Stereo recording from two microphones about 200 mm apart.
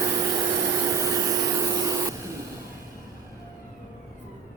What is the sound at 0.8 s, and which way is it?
Vacuum cleaner, 15° right (ahead or behind).